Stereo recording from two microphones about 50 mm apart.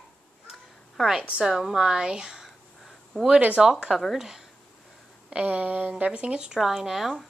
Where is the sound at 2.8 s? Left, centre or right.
Centre.